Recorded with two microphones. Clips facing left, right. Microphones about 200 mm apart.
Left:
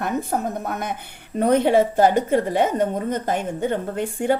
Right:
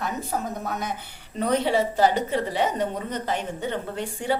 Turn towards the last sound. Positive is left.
turn(degrees=50)  # may be behind; listen again after turning